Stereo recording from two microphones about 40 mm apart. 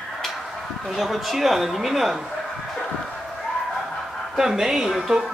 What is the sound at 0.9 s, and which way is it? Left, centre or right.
A woman's voice, centre.